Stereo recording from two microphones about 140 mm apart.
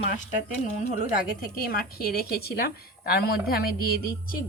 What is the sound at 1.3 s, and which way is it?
A woman's voice, 90° left.